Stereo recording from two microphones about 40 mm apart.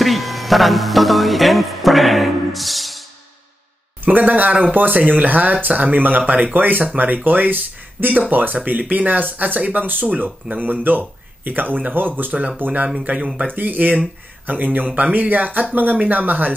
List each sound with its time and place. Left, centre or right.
0.0 s music: centre
4.0 s speech: right
9.6 s speech: right
12.3 s speech: right
12.5 s speech: right
13.0 s speech: right